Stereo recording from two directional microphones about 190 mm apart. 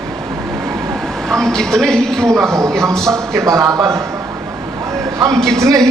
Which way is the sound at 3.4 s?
15° right (ahead or behind).